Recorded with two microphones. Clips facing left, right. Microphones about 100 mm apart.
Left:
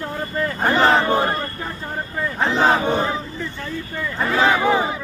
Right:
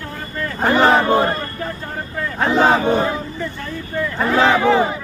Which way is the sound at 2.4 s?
10° right (ahead or behind).